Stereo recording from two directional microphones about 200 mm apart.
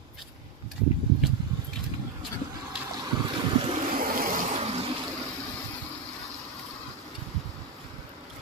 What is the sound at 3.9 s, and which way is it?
Vehicle, 45° right (ahead or behind).